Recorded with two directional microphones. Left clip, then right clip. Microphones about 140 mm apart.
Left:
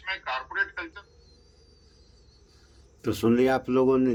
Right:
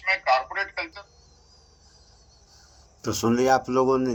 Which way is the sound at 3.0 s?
30° left (ahead or behind).